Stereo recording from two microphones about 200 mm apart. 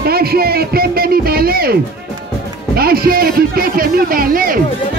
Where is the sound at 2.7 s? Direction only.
50° right (ahead or behind).